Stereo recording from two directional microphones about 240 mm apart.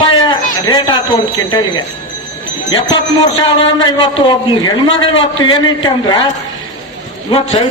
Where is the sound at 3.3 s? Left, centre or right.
Centre.